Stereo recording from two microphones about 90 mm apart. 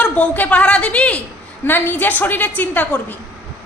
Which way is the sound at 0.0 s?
15° left (ahead or behind).